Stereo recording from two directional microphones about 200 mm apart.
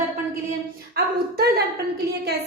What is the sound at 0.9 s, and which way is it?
A woman's voice, 55° right (ahead or behind).